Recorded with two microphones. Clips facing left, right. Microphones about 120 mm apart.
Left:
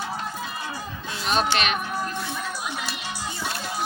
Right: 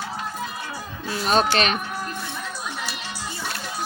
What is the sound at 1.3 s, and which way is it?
Speech, 40° right (ahead or behind).